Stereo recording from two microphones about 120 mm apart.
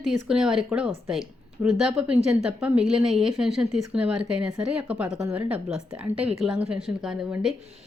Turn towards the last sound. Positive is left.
turn(degrees=-5)  # may be behind; listen again after turning